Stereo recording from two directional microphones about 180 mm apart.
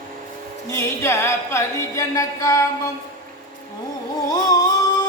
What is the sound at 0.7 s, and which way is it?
Music, 15° left (ahead or behind).